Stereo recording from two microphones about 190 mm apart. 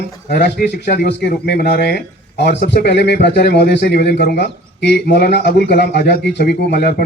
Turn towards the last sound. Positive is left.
turn(degrees=55)  # may be behind; listen again after turning